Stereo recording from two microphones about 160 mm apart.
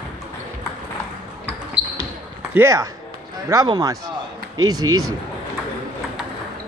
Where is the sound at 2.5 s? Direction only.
15° right (ahead or behind).